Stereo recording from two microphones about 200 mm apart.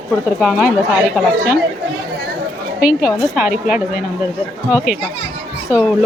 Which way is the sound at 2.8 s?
5° right (ahead or behind).